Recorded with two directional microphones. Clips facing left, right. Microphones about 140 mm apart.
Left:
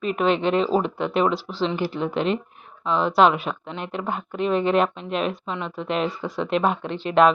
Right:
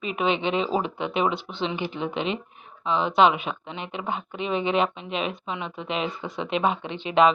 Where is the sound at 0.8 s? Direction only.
40° left (ahead or behind).